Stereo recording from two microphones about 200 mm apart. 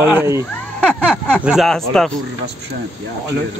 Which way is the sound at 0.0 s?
15° right (ahead or behind).